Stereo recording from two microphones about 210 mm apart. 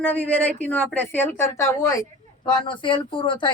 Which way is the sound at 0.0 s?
10° left (ahead or behind).